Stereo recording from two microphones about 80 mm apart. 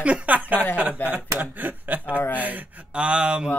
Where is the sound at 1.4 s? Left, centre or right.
Right.